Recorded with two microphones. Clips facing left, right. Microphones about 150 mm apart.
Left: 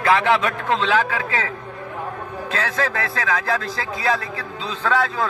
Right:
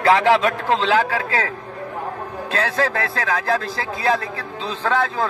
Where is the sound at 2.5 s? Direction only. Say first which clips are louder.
Right 3 dB; 30° right (ahead or behind).